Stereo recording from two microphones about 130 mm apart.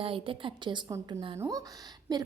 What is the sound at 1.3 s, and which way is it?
Speech, 20° right (ahead or behind).